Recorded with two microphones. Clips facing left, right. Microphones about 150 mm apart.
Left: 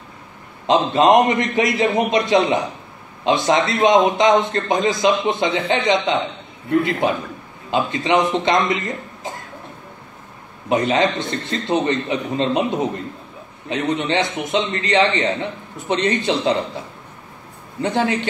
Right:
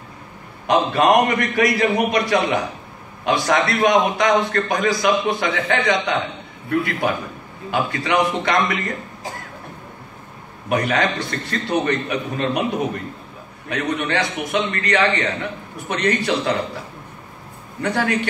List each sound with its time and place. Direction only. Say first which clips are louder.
0.7 s a man's voice: left 2 dB; 20° left (ahead or behind)
10.7 s a man's voice: left 2 dB; 20° left (ahead or behind)
17.8 s a man's voice: left 1 dB; 25° left (ahead or behind)